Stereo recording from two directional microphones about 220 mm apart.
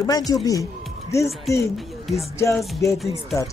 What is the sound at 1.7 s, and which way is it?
Speech, centre (ahead or behind).